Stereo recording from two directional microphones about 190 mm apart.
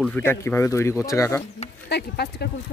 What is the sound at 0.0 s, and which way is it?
Speech, 10° left (ahead or behind).